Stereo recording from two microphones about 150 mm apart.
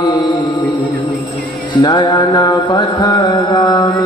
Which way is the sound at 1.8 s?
30° left (ahead or behind).